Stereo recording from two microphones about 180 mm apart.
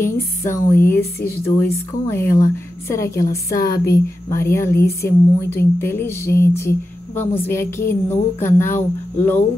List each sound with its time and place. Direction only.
0.0 s speech: 15° left (ahead or behind)